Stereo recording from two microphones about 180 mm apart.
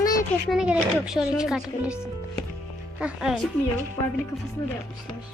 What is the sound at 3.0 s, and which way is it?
Speech, 5° right (ahead or behind).